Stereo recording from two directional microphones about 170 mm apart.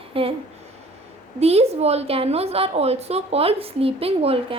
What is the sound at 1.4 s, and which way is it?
A woman's voice, 35° right (ahead or behind).